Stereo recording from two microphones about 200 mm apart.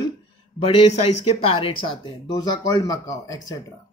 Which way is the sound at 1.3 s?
30° left (ahead or behind).